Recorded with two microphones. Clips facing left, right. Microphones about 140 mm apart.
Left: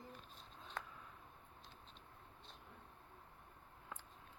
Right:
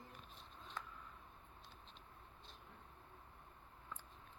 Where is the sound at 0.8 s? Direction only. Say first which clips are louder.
Left 2 dB; 60° left (ahead or behind).